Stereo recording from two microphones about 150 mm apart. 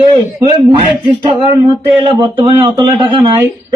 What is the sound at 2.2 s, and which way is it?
Speech, 40° right (ahead or behind).